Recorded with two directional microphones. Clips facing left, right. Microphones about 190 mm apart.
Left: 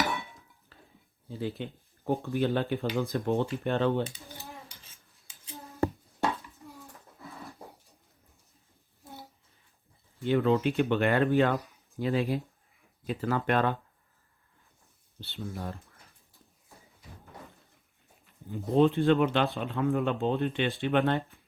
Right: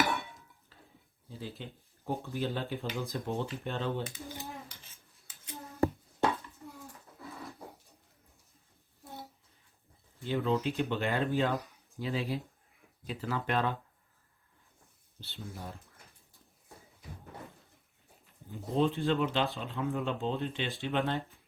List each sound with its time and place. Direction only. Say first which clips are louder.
0.7 s stir: left 3 dB; 65° left (ahead or behind)
1.3 s speech: left 8 dB; 60° left (ahead or behind)
10.2 s speech: left 6 dB; 65° left (ahead or behind)
15.2 s speech: left 6 dB; 60° left (ahead or behind)
18.5 s speech: left 6 dB; 55° left (ahead or behind)